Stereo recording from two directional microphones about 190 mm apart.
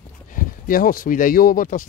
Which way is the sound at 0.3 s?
45° left (ahead or behind).